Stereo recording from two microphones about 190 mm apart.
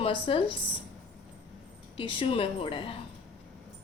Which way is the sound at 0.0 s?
25° left (ahead or behind).